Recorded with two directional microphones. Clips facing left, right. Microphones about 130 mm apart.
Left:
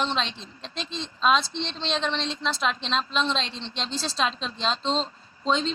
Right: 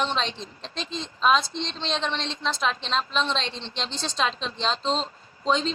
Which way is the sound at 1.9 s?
35° right (ahead or behind).